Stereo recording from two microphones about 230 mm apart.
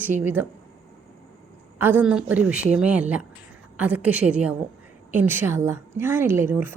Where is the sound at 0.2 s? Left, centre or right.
Centre.